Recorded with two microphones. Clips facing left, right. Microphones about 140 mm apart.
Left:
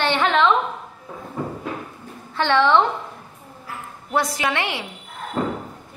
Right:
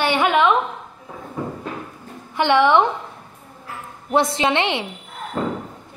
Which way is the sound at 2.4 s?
15° right (ahead or behind).